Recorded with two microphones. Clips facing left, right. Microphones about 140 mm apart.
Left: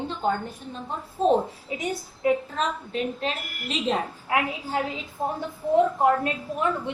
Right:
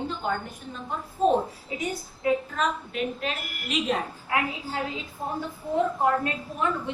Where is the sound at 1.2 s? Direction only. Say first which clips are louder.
Left 1 dB; 30° left (ahead or behind).